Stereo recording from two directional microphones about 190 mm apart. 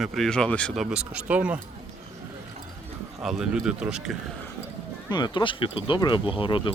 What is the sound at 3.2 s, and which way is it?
Speech, 5° right (ahead or behind).